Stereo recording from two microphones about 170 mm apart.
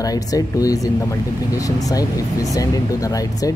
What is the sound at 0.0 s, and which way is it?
Speech, 20° left (ahead or behind).